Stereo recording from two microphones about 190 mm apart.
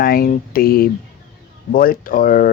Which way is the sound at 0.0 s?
50° left (ahead or behind).